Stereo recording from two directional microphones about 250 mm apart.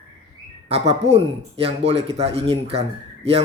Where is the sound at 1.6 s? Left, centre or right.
Right.